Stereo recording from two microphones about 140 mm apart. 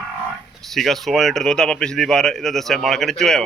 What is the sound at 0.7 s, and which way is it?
Speech, centre (ahead or behind).